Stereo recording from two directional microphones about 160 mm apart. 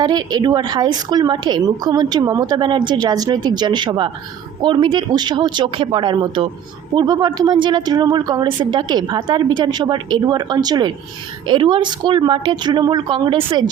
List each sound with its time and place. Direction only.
0.0 s speech: 25° right (ahead or behind)